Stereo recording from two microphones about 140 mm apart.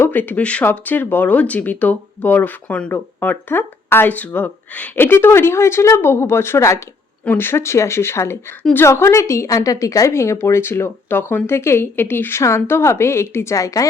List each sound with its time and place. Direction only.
0.0 s a woman's voice: 15° left (ahead or behind)